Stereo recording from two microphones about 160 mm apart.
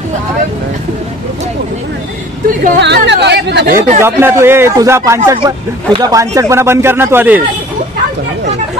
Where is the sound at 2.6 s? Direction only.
90° right.